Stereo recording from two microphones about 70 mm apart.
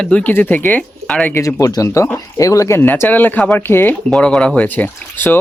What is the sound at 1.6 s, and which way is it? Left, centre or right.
Speech, left.